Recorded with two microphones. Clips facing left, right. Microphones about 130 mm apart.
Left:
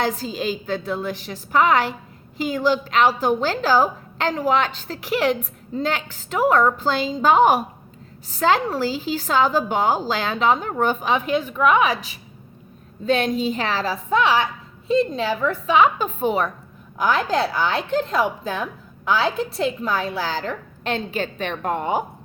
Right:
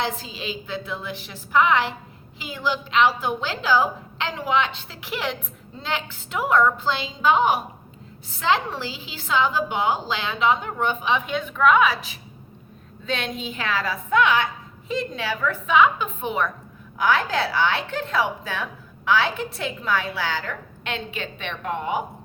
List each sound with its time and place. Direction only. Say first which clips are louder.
0.0 s a woman's voice: left 5 dB; 40° left (ahead or behind)
11.5 s a woman's voice: right 1 dB; 15° left (ahead or behind)
13.1 s a woman's voice: left 9 dB; 40° left (ahead or behind)